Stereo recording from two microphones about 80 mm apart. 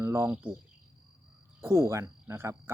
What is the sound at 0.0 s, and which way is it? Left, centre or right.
Speech, right.